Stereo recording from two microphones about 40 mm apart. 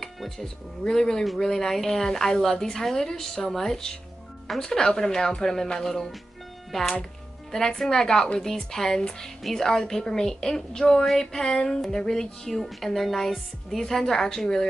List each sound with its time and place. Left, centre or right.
0.0 s a woman's voice: centre